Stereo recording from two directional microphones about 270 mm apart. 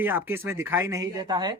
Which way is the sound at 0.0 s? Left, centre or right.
Centre.